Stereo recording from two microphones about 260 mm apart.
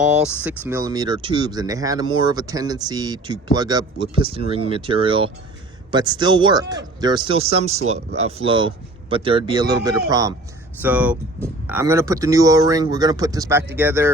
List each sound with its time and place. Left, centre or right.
0.0 s speech: centre